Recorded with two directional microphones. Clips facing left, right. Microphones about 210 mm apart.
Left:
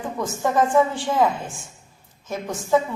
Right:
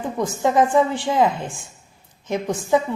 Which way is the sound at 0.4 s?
15° right (ahead or behind).